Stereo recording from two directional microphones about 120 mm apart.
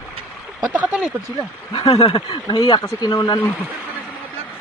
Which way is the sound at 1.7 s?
45° left (ahead or behind).